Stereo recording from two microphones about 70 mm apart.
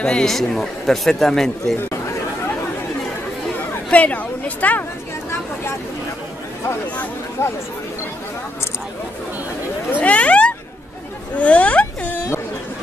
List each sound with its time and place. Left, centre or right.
0.0 s speech: centre
3.9 s speech: left
9.8 s a sound: left